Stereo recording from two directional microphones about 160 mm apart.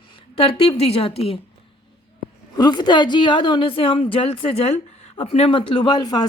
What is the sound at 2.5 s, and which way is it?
A woman's voice, 25° left (ahead or behind).